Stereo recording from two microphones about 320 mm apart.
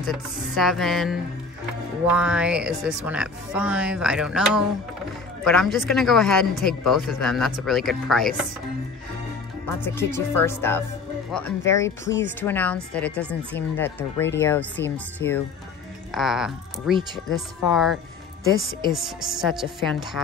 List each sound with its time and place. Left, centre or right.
0.0 s speech: centre
9.9 s speech: centre
18.4 s speech: centre
18.9 s speech: centre